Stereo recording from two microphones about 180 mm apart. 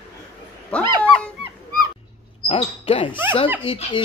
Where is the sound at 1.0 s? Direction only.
5° left (ahead or behind).